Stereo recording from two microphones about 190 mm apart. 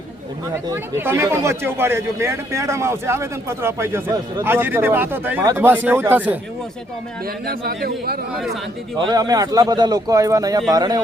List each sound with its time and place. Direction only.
0.5 s speech: 15° right (ahead or behind)
7.4 s a man's voice: 55° right (ahead or behind)
9.0 s a man's voice: 20° right (ahead or behind)